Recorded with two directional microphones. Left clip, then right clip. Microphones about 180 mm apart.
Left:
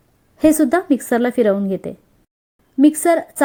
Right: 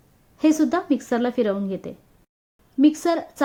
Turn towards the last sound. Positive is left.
turn(degrees=20)  # may be behind; listen again after turning